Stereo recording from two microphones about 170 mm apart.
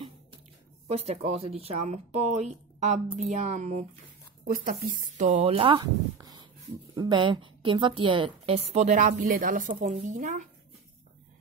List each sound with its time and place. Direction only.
0.8 s a woman's voice: 40° right (ahead or behind)